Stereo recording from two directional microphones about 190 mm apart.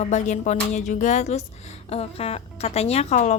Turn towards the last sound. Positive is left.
turn(degrees=35)  # may be behind; listen again after turning